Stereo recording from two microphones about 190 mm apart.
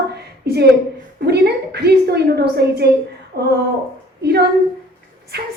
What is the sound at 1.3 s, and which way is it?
A woman's voice, 60° right (ahead or behind).